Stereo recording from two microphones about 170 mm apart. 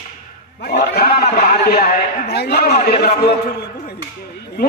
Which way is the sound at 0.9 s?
65° left (ahead or behind).